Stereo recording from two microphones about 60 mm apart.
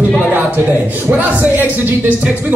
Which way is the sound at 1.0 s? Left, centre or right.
Right.